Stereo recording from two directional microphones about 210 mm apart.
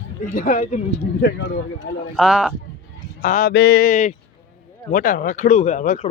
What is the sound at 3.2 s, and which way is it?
Speech, 40° left (ahead or behind).